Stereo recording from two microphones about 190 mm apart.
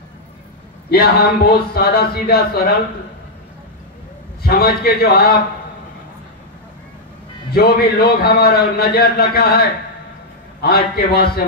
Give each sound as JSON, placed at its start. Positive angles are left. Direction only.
{"t": 0.8, "sound": "speech", "side_deg": 55}
{"t": 4.4, "sound": "speech", "side_deg": 55}
{"t": 7.5, "sound": "a man's voice", "side_deg": 55}